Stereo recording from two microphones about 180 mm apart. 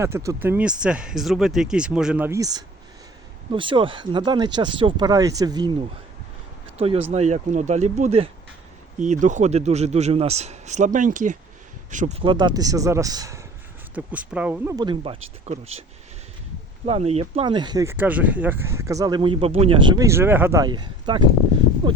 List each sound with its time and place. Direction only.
0.0 s speech: 15° right (ahead or behind)
6.7 s speech: 35° right (ahead or behind)
13.9 s speech: 10° right (ahead or behind)
14.8 s speech: 30° right (ahead or behind)
16.8 s speech: 35° right (ahead or behind)
17.9 s speech: 10° right (ahead or behind); by 21.2 s 25° right (ahead or behind)